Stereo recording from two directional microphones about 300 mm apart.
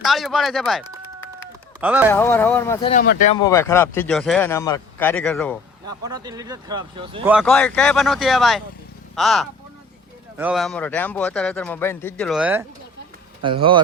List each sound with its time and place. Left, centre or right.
0.0 s speech: centre
2.1 s speech: centre
2.9 s speech: left
3.4 s speech: centre
5.8 s speech: centre
7.3 s speech: centre
13.4 s speech: centre